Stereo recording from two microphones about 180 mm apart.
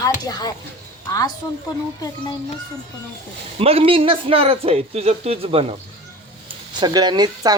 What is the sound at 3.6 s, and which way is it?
A man's voice, 35° right (ahead or behind).